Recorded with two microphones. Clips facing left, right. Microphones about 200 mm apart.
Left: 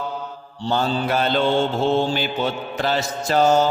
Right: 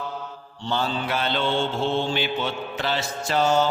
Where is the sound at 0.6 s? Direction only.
40° left (ahead or behind).